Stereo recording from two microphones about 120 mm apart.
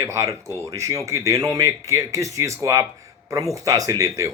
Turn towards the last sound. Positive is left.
turn(degrees=-30)  # may be behind; listen again after turning